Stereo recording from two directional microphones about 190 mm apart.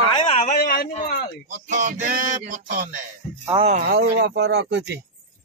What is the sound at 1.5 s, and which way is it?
Speech, 40° right (ahead or behind).